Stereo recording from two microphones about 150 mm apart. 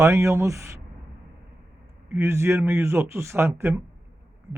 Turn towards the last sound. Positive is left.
turn(degrees=-15)  # may be behind; listen again after turning